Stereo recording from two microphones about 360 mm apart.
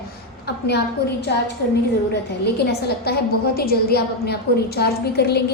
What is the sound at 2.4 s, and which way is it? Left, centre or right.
A woman's voice, left.